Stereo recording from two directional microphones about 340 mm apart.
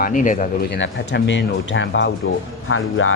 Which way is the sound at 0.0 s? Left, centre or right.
Left.